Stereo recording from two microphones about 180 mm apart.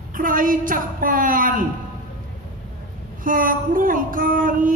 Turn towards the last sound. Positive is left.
turn(degrees=-50)  # may be behind; listen again after turning